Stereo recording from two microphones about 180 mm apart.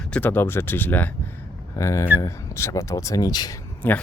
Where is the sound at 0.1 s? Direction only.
10° left (ahead or behind).